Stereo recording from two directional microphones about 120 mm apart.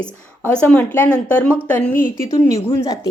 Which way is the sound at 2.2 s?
25° left (ahead or behind).